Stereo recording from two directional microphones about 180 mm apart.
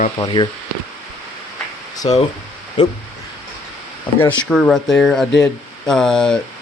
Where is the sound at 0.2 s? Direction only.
25° left (ahead or behind).